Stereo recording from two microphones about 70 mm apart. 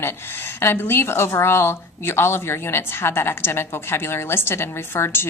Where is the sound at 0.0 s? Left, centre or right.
Left.